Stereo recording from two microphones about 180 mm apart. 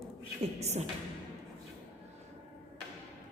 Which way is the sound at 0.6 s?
40° right (ahead or behind).